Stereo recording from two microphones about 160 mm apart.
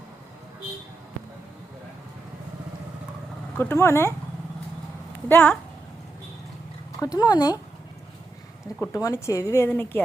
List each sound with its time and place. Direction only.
3.6 s speech: 15° left (ahead or behind)
5.3 s speech: 10° left (ahead or behind)
7.0 s speech: 25° left (ahead or behind)
8.8 s speech: 20° left (ahead or behind)